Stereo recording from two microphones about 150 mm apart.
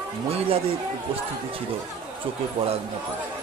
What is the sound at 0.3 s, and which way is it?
Speech, 40° right (ahead or behind).